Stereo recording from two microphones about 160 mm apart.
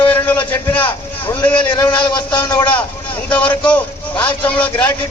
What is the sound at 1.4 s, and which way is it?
Speech, 25° left (ahead or behind).